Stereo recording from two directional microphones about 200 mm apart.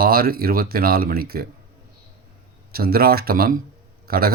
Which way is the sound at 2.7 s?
50° right (ahead or behind).